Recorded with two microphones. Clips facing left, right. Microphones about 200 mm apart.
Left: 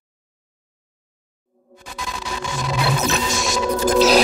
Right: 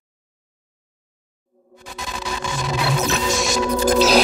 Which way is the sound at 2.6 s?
Centre (ahead or behind).